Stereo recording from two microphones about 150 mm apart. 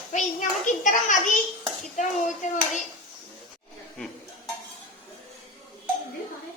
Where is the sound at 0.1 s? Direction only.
55° left (ahead or behind).